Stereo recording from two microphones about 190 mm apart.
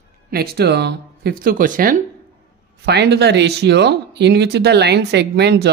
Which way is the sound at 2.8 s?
60° right (ahead or behind).